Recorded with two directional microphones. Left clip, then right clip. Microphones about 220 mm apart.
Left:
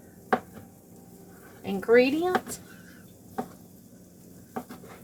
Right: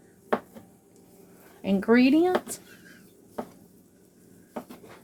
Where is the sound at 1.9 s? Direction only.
50° right (ahead or behind).